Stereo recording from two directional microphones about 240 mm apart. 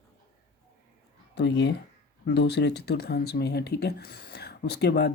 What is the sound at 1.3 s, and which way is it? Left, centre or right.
Speech, left.